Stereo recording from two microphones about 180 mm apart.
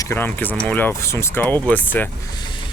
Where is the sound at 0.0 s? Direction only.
10° left (ahead or behind).